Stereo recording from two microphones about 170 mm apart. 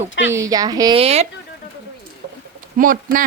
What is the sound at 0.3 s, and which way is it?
Speech, 20° right (ahead or behind).